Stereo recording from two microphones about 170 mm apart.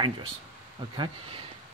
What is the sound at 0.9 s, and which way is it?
Speech, 25° right (ahead or behind).